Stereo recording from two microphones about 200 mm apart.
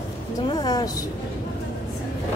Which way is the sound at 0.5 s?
20° left (ahead or behind).